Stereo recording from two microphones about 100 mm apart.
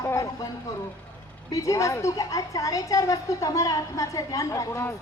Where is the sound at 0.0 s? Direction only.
30° left (ahead or behind).